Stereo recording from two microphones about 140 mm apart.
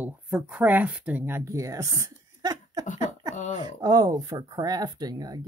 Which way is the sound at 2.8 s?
55° left (ahead or behind).